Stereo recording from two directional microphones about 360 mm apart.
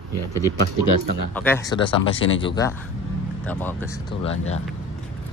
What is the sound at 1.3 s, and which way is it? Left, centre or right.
Speech, centre.